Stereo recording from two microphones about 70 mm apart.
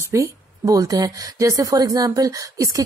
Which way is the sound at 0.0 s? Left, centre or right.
Right.